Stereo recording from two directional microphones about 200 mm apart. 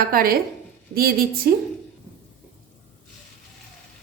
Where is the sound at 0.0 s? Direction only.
45° right (ahead or behind).